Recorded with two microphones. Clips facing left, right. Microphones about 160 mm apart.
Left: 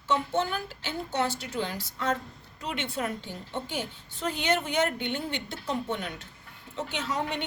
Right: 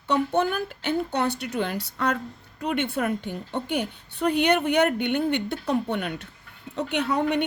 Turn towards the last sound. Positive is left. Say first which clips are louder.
# right 8 dB
turn(degrees=-60)  # may be behind; listen again after turning